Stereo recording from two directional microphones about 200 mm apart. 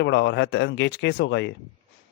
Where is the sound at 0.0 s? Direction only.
60° left (ahead or behind).